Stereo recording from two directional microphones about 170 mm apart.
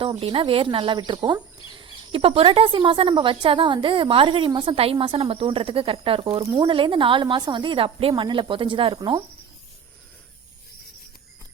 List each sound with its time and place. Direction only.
0.0 s speech: 30° right (ahead or behind)